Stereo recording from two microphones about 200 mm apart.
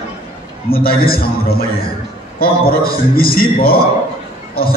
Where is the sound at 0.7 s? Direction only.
50° left (ahead or behind).